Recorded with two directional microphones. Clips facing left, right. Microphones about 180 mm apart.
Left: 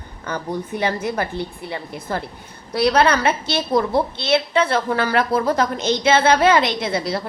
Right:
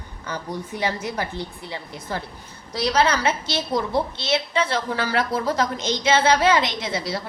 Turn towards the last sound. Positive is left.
turn(degrees=55)  # may be behind; listen again after turning